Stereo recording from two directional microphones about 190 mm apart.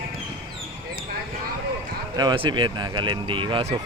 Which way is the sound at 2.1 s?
20° right (ahead or behind).